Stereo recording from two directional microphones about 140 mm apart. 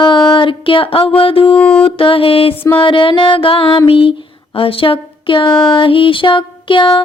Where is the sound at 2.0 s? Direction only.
40° left (ahead or behind).